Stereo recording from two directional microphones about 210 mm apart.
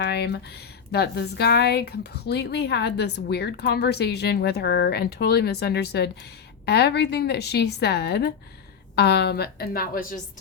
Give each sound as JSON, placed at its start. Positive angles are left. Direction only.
{"t": 0.0, "sound": "speech", "side_deg": 55}